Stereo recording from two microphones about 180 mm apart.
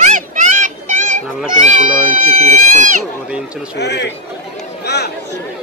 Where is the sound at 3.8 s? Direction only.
70° left (ahead or behind).